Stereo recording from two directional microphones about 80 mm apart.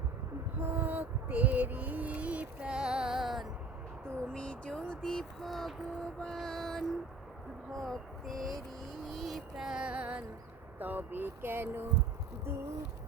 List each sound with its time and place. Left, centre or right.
0.6 s music: right; by 3.4 s centre
4.0 s a sound: centre
6.2 s mantra: centre
7.7 s a sound: centre
9.0 s music: centre
10.8 s speech: right